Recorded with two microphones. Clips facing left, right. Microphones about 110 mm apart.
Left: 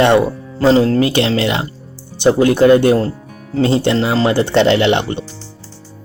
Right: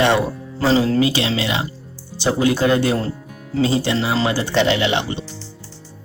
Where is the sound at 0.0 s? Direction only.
55° left (ahead or behind).